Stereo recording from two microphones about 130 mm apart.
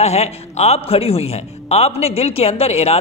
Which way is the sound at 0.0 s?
55° left (ahead or behind).